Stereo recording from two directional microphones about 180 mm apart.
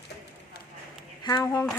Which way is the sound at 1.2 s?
20° left (ahead or behind).